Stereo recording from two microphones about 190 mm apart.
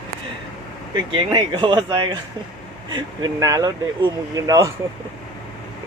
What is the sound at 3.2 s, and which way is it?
Speech, 20° right (ahead or behind).